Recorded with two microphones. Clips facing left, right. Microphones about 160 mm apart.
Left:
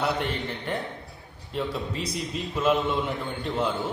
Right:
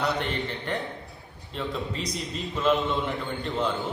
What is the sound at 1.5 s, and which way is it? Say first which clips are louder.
Speech: left 2 dB; 10° left (ahead or behind).